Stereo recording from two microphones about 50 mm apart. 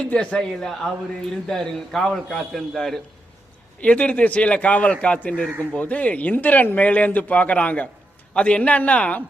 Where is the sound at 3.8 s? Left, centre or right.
Left.